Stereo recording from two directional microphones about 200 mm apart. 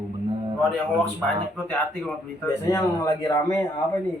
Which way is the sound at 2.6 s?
15° left (ahead or behind).